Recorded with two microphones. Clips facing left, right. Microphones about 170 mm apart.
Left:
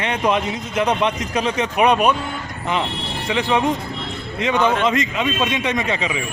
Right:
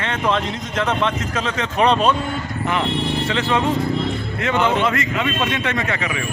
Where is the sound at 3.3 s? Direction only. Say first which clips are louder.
Left 4 dB; 15° left (ahead or behind).